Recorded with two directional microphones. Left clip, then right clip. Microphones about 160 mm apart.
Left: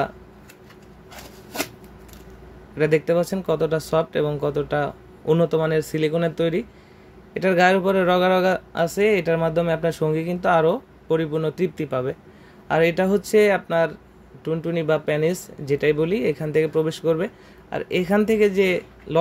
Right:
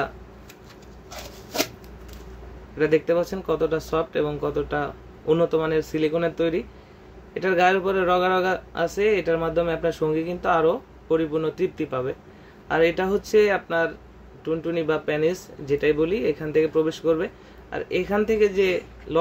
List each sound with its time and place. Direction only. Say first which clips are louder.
2.8 s a man's voice: left 1 dB; 45° left (ahead or behind)